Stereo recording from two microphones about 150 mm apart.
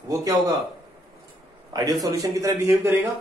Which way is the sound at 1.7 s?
25° right (ahead or behind).